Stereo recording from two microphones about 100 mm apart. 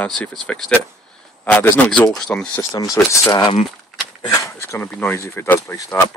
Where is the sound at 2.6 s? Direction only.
30° left (ahead or behind).